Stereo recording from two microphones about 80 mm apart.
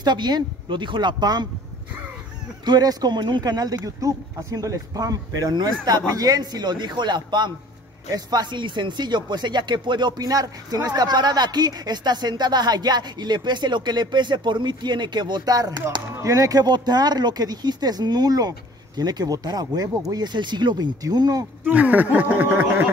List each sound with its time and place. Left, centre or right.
0.0 s speech: right
2.6 s speech: right
8.1 s speech: right
21.0 s speech: right
21.6 s speech: right